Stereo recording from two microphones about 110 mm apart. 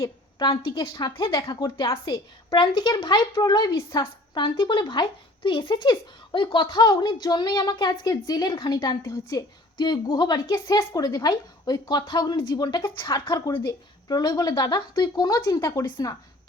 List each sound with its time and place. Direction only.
0.0 s a woman's voice: 40° left (ahead or behind)
2.5 s speech: 45° left (ahead or behind)